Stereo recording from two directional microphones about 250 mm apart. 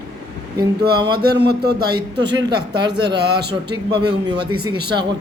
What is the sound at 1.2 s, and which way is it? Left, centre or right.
Speech, right.